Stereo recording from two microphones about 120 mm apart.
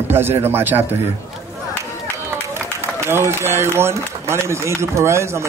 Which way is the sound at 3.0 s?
20° right (ahead or behind).